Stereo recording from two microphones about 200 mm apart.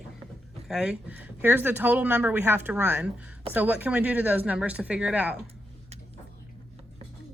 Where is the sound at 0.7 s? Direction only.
5° right (ahead or behind).